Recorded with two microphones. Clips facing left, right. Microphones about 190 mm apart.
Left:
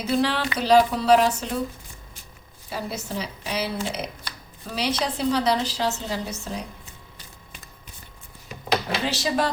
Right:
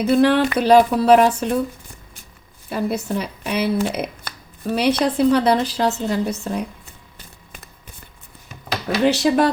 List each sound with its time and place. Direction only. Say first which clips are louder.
0.0 s speech: right 8 dB; 55° right (ahead or behind)
2.6 s speech: right 8 dB; 60° right (ahead or behind)
9.0 s speech: right 9 dB; 60° right (ahead or behind)